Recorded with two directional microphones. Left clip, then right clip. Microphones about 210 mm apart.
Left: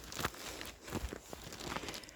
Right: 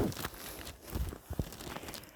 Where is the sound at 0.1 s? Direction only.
40° right (ahead or behind).